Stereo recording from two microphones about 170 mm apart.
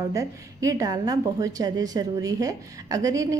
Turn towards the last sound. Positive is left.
turn(degrees=-20)  # may be behind; listen again after turning